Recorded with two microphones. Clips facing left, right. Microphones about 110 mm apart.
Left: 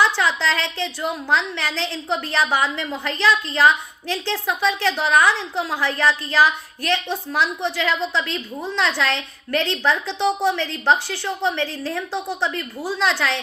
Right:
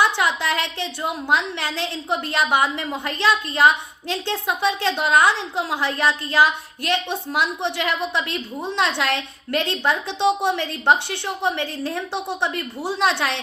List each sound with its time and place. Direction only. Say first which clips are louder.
0.0 s a woman's voice: left 1 dB; 20° right (ahead or behind)